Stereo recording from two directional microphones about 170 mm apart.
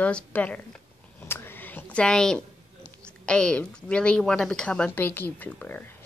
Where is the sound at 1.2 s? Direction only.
15° left (ahead or behind).